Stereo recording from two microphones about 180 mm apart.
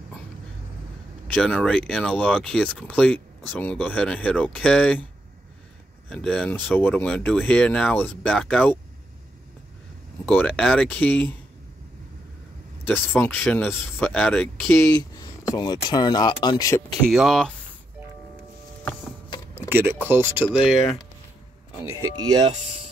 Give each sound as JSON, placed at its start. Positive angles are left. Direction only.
{"t": 1.2, "sound": "speech", "side_deg": 5}
{"t": 6.0, "sound": "speech", "side_deg": 5}
{"t": 10.2, "sound": "speech", "side_deg": 10}
{"t": 12.8, "sound": "speech", "side_deg": 10}
{"t": 14.9, "sound": "speech", "side_deg": 20}
{"t": 17.0, "sound": "speech", "side_deg": 0}
{"t": 19.7, "sound": "speech", "side_deg": -10}